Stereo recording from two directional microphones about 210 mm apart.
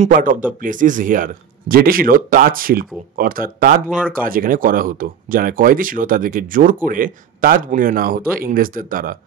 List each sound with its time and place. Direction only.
0.0 s speech: 40° right (ahead or behind)